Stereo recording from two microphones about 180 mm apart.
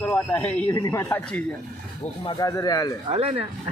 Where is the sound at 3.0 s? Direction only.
30° right (ahead or behind).